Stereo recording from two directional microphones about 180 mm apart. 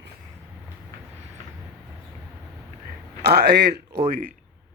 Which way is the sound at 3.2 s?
65° right (ahead or behind).